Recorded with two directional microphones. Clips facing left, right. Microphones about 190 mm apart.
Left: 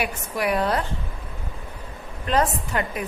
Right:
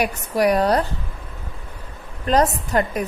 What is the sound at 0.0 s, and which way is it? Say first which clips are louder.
Speech: right 6 dB; 40° right (ahead or behind).